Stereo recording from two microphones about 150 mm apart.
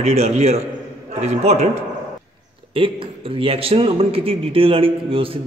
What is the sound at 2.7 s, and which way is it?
A man's voice, 35° right (ahead or behind).